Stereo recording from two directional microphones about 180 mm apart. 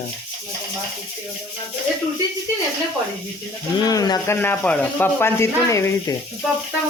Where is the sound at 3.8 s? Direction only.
20° left (ahead or behind).